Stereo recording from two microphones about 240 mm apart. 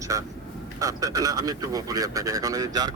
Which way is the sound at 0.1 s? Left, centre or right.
Centre.